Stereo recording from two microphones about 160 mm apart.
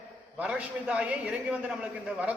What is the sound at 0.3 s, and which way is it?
A man's voice, 5° right (ahead or behind).